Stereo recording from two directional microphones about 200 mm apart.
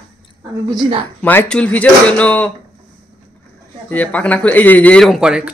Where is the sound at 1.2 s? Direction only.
5° left (ahead or behind).